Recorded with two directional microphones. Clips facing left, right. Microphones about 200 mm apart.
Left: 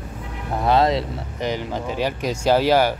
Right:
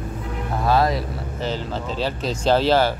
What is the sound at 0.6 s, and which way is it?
Speech, 20° left (ahead or behind).